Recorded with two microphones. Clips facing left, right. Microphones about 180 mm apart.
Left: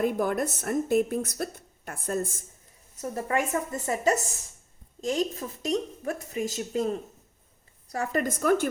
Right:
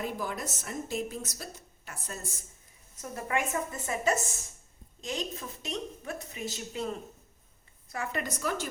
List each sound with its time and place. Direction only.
0.0 s a woman's voice: 55° left (ahead or behind)
3.0 s a woman's voice: 35° left (ahead or behind)
7.9 s a woman's voice: 45° left (ahead or behind)